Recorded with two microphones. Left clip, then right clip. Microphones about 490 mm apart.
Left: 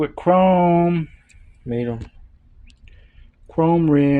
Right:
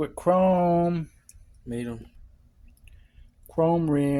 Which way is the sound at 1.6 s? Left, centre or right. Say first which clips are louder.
Left 9 dB; right.